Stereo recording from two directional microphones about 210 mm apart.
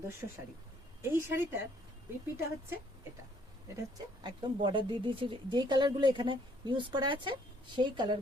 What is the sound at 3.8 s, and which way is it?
Speech, 20° right (ahead or behind).